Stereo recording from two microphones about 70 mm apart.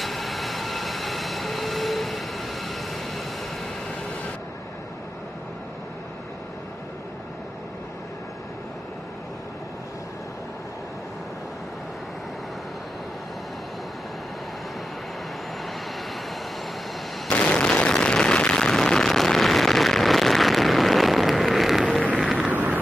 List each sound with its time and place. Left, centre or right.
0.0 s train: centre
17.3 s a sound: centre
22.2 s vehicle: centre
22.5 s vehicle: right